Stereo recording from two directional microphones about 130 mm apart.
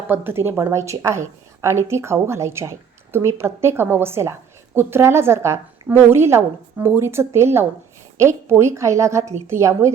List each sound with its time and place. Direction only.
0.1 s a woman's voice: 15° right (ahead or behind)